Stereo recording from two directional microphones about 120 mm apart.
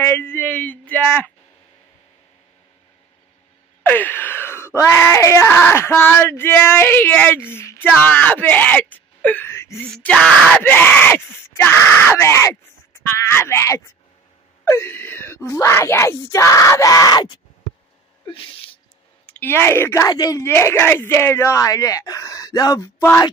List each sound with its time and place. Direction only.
0.0 s a man's voice: 20° left (ahead or behind)
3.8 s a sound: 15° left (ahead or behind)
9.8 s speech: 5° left (ahead or behind); by 17.4 s 35° left (ahead or behind)
19.2 s speech: 15° left (ahead or behind)